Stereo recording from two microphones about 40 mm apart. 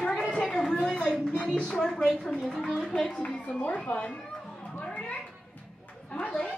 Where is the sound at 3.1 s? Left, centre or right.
Left.